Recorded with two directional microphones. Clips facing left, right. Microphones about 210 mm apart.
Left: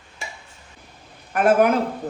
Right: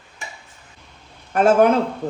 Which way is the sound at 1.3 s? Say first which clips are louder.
Right 2 dB; 30° right (ahead or behind).